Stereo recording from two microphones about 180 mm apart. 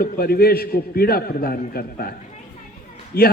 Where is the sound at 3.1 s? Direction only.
60° left (ahead or behind).